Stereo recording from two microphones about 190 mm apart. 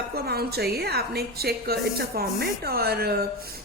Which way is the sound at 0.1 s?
55° right (ahead or behind).